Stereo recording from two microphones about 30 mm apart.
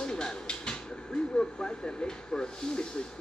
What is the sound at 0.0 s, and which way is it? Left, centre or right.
Speech, left.